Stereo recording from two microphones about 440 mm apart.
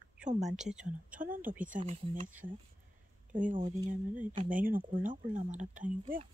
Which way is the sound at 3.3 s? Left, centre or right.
Centre.